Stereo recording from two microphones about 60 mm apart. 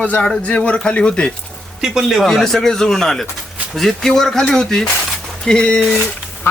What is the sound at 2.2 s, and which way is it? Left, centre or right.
Speech, centre.